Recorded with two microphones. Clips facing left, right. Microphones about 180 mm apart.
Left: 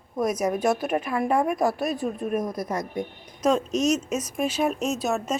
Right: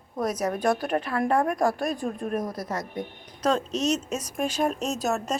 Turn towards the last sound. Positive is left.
turn(degrees=0)  # may be behind; listen again after turning